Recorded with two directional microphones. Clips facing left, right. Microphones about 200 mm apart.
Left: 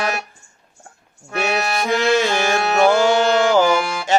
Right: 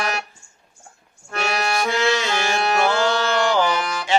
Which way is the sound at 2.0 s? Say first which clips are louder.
Left 4 dB; 50° left (ahead or behind).